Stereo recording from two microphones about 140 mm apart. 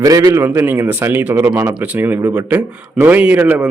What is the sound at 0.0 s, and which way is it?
Speech, 25° right (ahead or behind).